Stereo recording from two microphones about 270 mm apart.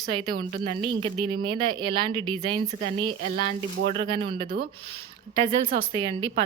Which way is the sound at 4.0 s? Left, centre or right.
Centre.